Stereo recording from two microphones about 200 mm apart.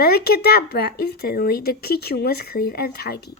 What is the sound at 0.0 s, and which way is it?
A woman's voice, 50° left (ahead or behind).